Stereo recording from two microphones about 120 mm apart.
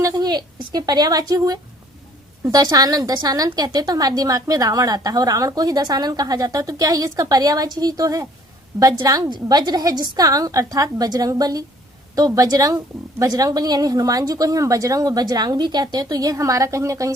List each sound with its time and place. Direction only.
0.0 s a woman's voice: 35° right (ahead or behind)